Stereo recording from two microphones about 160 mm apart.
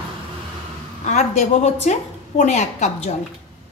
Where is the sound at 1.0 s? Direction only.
45° left (ahead or behind).